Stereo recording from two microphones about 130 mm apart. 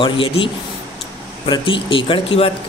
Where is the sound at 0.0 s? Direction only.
40° left (ahead or behind).